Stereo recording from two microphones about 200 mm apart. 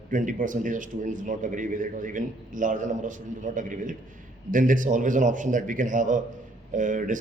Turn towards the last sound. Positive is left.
turn(degrees=-40)  # may be behind; listen again after turning